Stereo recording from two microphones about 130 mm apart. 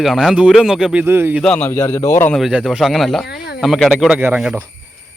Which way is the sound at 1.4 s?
10° left (ahead or behind).